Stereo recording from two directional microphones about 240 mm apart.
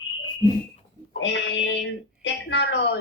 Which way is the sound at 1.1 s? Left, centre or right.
Left.